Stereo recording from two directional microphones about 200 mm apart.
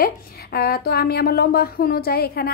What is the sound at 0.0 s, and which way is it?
Speech, 50° left (ahead or behind).